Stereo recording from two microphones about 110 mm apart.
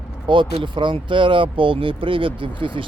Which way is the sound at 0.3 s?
50° right (ahead or behind).